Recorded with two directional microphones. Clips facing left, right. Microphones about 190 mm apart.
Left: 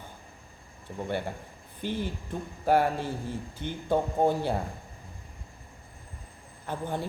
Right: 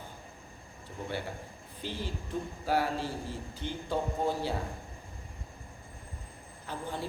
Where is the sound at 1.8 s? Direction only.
55° left (ahead or behind).